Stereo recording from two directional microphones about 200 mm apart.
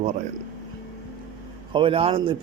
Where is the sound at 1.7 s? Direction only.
25° right (ahead or behind).